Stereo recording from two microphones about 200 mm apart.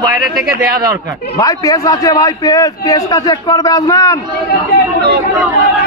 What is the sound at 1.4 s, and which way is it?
A man's voice, 20° left (ahead or behind).